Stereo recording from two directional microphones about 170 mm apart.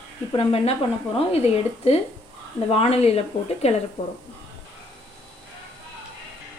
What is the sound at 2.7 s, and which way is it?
A woman's voice, 35° left (ahead or behind).